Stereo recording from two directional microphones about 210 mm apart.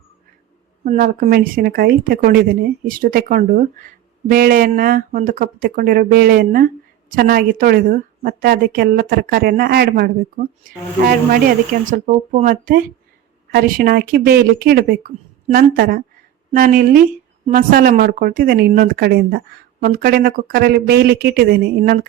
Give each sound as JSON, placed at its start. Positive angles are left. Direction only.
{"t": 0.9, "sound": "a woman's voice", "side_deg": -45}